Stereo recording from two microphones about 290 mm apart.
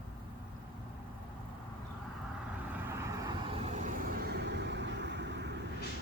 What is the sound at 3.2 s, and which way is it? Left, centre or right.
Vehicle, right.